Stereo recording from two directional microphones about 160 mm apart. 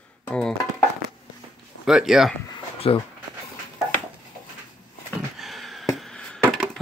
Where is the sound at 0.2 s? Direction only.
5° left (ahead or behind).